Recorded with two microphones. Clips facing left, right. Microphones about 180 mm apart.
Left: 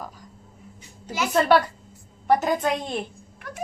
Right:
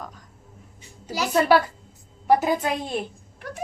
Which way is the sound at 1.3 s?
5° right (ahead or behind).